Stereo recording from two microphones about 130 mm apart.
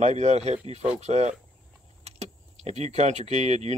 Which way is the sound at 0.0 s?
60° right (ahead or behind).